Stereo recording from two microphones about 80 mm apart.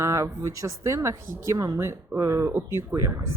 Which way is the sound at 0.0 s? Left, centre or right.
Right.